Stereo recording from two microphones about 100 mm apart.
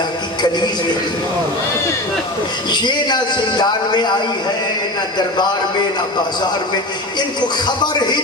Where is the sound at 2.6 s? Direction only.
45° left (ahead or behind).